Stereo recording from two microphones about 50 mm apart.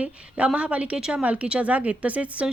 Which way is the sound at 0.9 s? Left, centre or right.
Centre.